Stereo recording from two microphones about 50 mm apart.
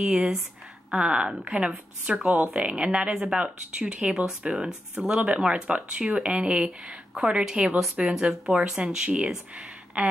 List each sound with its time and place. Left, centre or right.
0.0 s speech: centre
10.0 s speech: right